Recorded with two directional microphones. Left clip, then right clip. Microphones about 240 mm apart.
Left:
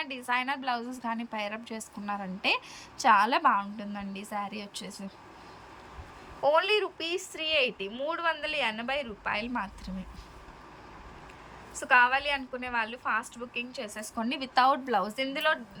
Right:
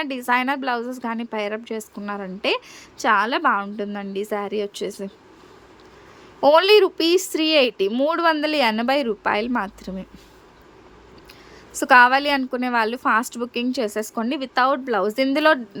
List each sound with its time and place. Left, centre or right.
0.0 s a woman's voice: centre
7.0 s a woman's voice: right
11.9 s a woman's voice: centre